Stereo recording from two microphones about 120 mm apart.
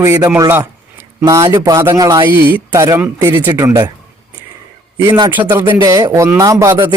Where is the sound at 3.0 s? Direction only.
15° right (ahead or behind).